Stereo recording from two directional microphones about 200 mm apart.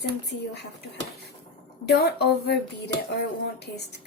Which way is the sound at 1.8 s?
55° left (ahead or behind).